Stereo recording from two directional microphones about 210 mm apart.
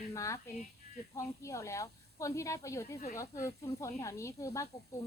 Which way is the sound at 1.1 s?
15° left (ahead or behind).